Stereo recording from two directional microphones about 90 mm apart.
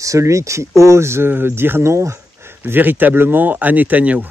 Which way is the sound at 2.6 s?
20° right (ahead or behind).